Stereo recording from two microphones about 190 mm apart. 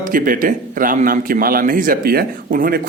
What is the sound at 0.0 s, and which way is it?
A man's voice, 45° right (ahead or behind).